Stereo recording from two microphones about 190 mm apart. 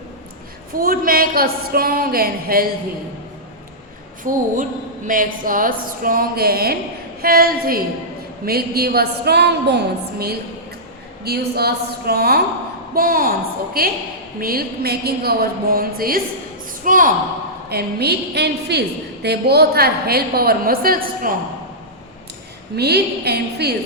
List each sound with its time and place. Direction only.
0.8 s speech: 50° right (ahead or behind)
4.2 s a woman's voice: 45° right (ahead or behind)
17.7 s a woman's voice: 55° right (ahead or behind)
22.7 s a woman's voice: 60° right (ahead or behind)